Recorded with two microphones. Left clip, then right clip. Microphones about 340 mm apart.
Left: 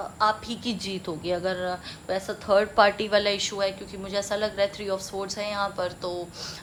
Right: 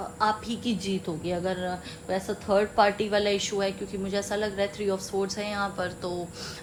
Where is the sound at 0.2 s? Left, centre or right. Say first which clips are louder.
Left 2 dB; left.